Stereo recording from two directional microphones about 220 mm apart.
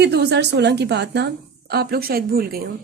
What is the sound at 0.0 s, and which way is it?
A woman's voice, 50° right (ahead or behind).